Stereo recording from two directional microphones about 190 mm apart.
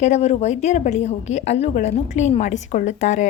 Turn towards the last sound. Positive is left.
turn(degrees=40)  # may be behind; listen again after turning